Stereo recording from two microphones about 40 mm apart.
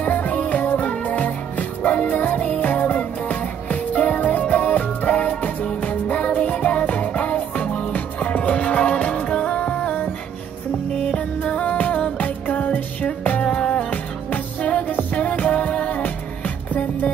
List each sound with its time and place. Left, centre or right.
0.0 s music: left
11.0 s music: left
11.6 s music: left